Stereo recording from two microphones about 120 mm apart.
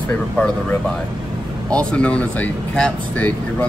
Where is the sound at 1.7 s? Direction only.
10° left (ahead or behind).